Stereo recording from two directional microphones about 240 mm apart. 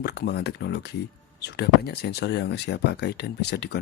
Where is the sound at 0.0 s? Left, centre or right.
Left.